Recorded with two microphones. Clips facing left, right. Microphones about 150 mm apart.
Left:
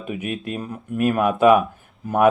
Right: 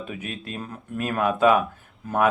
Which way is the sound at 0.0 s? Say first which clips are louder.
Left 6 dB; 15° left (ahead or behind).